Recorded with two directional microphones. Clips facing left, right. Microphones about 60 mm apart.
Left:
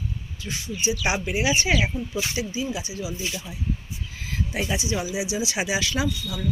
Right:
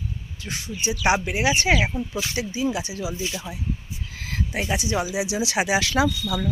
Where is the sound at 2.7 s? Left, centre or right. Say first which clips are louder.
Right 3 dB; right.